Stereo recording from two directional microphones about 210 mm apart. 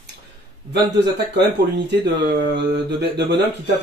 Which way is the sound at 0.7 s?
55° right (ahead or behind).